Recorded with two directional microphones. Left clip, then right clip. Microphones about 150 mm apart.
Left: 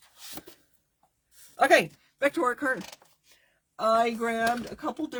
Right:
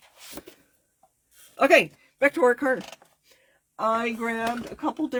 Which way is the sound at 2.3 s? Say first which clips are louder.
Right 5 dB; 50° right (ahead or behind).